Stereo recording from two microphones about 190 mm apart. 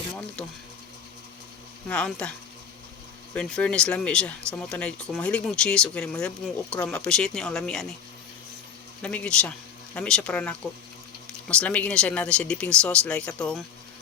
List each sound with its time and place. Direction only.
0.4 s speech: 5° left (ahead or behind)
1.9 s speech: 5° left (ahead or behind)
3.3 s speech: 5° left (ahead or behind)
9.0 s speech: 5° left (ahead or behind)